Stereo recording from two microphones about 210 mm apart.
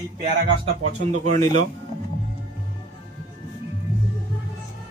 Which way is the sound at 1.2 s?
35° right (ahead or behind).